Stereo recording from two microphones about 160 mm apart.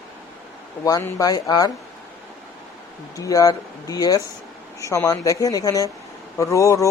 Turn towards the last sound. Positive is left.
turn(degrees=20)  # may be behind; listen again after turning